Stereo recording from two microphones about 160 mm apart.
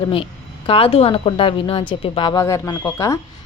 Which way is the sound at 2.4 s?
20° left (ahead or behind).